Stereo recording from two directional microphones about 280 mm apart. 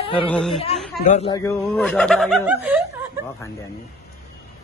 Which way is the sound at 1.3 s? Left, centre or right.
Centre.